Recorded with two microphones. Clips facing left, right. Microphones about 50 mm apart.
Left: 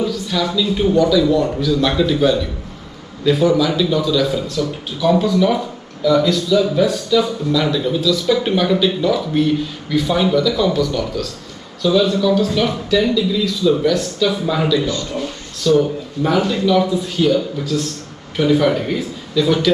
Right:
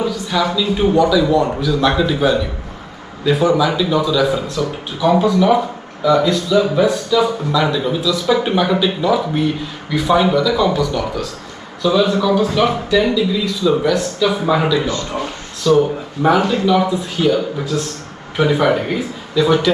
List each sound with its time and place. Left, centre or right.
0.0 s speech: centre